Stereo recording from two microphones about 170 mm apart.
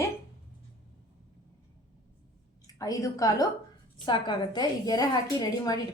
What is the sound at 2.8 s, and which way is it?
A woman's voice, 20° left (ahead or behind).